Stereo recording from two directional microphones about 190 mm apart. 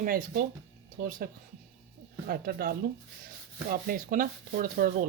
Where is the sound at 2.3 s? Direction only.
55° right (ahead or behind).